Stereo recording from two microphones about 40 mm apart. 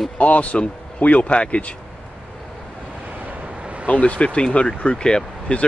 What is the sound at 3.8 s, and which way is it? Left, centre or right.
Speech, left.